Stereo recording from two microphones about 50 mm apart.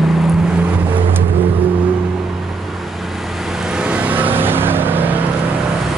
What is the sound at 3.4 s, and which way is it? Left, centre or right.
Vehicle, centre.